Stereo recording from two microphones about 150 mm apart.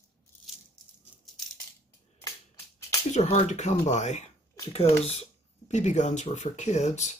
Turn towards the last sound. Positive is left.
turn(degrees=50)  # may be behind; listen again after turning